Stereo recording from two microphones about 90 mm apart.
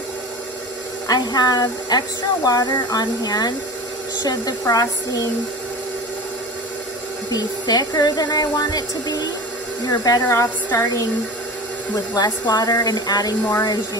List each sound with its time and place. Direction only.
1.0 s speech: 45° left (ahead or behind)
7.3 s speech: 45° left (ahead or behind)
11.9 s speech: 45° left (ahead or behind)